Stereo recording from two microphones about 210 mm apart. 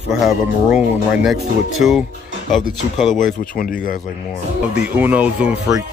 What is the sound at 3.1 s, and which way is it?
Speech, 40° left (ahead or behind).